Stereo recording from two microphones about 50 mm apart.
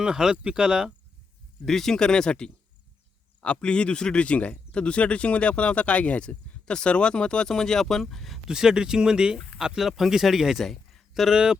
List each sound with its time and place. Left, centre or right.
0.0 s speech: centre
1.6 s speech: centre
8.4 s speech: centre